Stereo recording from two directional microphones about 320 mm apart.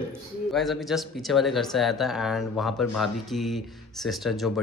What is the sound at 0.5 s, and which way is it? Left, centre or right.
Speech, centre.